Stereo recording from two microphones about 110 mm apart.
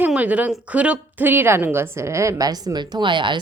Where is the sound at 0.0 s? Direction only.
15° right (ahead or behind).